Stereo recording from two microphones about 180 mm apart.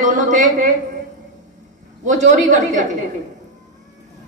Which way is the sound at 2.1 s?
45° right (ahead or behind).